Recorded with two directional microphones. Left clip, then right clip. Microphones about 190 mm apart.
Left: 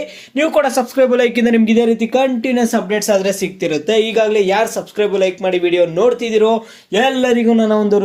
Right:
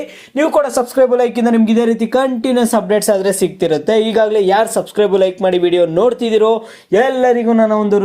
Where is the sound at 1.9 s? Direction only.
80° right.